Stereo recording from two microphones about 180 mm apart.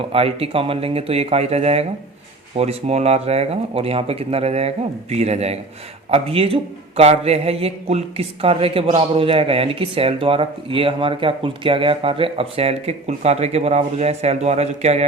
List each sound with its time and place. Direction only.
0.1 s a man's voice: 30° right (ahead or behind)